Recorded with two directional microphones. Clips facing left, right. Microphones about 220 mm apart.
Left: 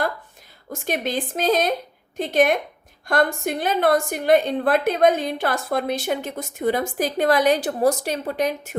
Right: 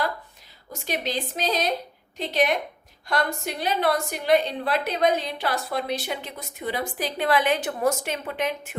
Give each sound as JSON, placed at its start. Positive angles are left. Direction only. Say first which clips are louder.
{"t": 0.7, "sound": "a woman's voice", "louder": "left 4 dB", "side_deg": 50}